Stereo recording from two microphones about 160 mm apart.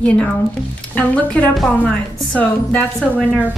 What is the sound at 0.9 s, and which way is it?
A woman's voice, 10° left (ahead or behind).